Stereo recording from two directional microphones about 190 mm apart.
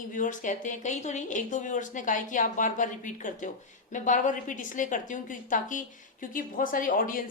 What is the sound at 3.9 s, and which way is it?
A woman's voice, 40° left (ahead or behind).